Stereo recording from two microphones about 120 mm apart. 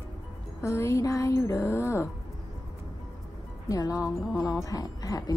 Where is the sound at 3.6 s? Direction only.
30° left (ahead or behind).